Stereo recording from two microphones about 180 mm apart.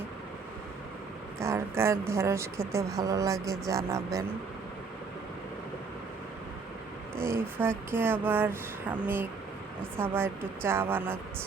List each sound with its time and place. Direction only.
1.4 s speech: 15° right (ahead or behind)
7.2 s speech: 15° right (ahead or behind)